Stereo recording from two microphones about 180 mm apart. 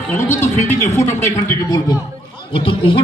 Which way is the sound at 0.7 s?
15° left (ahead or behind).